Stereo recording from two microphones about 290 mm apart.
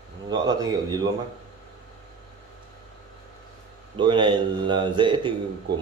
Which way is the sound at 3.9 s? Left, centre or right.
Centre.